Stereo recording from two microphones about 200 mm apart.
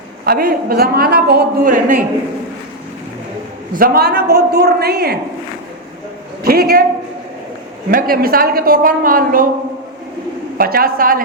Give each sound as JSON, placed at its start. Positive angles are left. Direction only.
{"t": 0.3, "sound": "a woman's voice", "side_deg": -50}
{"t": 3.8, "sound": "a woman's voice", "side_deg": -50}
{"t": 6.4, "sound": "a woman's voice", "side_deg": -50}
{"t": 7.9, "sound": "a woman's voice", "side_deg": -45}
{"t": 10.6, "sound": "a woman's voice", "side_deg": -50}